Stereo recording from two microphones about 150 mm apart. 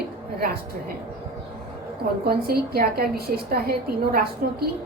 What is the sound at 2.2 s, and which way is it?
A woman's voice, 90° right.